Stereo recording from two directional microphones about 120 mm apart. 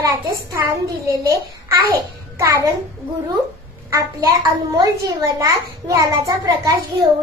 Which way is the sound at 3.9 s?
30° right (ahead or behind).